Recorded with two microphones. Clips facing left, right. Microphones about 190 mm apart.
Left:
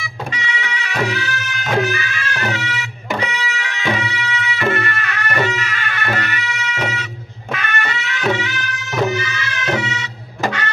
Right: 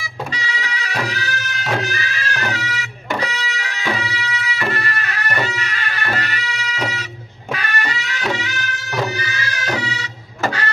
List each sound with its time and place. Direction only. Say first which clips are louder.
0.3 s music: left 1 dB; 35° right (ahead or behind)